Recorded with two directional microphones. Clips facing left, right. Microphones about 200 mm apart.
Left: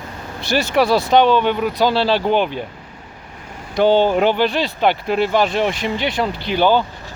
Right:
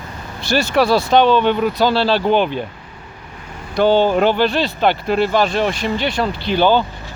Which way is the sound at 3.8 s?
20° left (ahead or behind).